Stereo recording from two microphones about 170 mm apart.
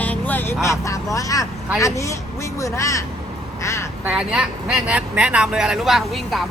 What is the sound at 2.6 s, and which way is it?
Speech, 20° left (ahead or behind).